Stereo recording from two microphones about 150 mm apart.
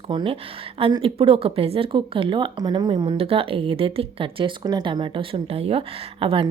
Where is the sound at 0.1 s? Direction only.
35° right (ahead or behind).